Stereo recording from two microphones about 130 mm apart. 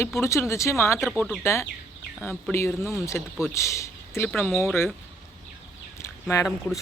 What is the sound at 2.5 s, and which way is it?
Speech, 20° left (ahead or behind).